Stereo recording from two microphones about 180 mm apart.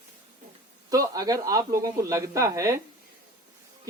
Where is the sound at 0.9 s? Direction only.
20° right (ahead or behind).